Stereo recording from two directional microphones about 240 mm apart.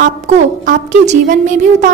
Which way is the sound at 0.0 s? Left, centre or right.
Right.